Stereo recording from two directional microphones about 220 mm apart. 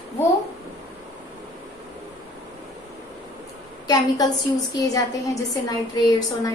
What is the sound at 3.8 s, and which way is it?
A woman's voice, 15° left (ahead or behind).